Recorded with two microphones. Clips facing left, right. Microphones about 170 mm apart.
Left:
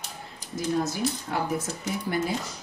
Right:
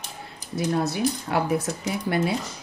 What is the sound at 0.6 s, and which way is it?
Speech, 70° right (ahead or behind).